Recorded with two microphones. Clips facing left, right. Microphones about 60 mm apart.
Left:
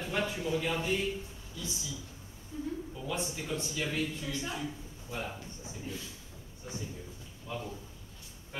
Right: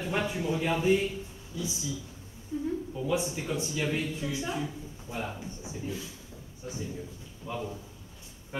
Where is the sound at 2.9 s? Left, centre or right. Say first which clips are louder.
Right 6 dB; centre.